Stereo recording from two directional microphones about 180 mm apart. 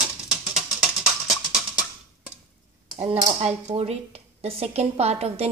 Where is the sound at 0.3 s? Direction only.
5° right (ahead or behind).